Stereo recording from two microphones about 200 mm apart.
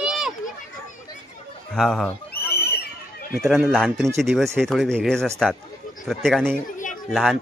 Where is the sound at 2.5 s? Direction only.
50° left (ahead or behind).